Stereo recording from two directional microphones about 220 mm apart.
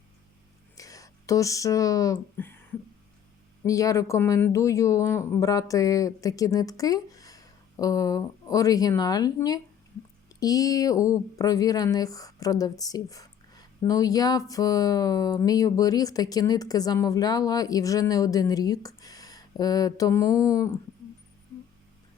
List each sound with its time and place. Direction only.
0.8 s speech: 15° left (ahead or behind)
3.6 s speech: 15° left (ahead or behind)